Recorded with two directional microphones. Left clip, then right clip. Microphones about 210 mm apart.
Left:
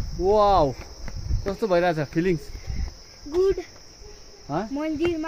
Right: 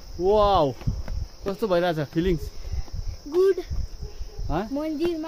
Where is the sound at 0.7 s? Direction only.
10° right (ahead or behind).